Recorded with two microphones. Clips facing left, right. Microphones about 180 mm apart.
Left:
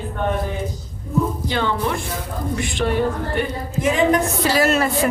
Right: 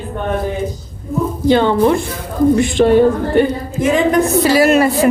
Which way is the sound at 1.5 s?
30° right (ahead or behind).